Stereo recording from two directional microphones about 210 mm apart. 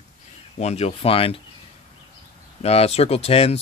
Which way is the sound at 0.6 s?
30° left (ahead or behind).